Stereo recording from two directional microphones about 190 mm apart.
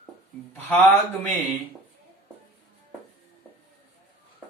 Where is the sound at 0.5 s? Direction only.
10° left (ahead or behind).